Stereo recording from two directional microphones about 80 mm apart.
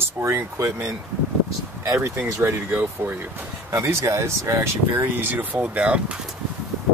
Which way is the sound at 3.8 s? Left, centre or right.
Right.